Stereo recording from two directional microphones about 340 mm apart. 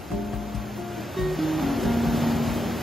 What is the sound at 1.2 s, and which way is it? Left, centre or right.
Music, centre.